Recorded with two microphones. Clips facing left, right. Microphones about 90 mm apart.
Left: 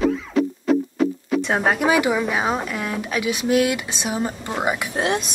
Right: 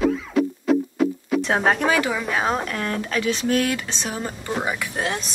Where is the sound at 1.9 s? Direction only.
15° left (ahead or behind).